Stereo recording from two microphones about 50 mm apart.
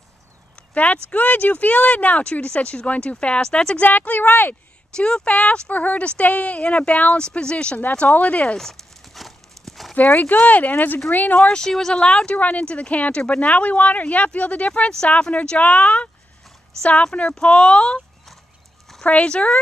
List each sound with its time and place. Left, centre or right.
0.6 s speech: left
3.8 s speech: left
4.9 s speech: centre
8.5 s a sound: centre
9.9 s speech: left
11.4 s speech: centre
14.7 s speech: centre
19.0 s speech: left